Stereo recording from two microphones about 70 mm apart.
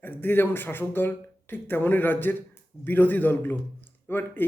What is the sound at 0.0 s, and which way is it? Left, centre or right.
A man's voice, left.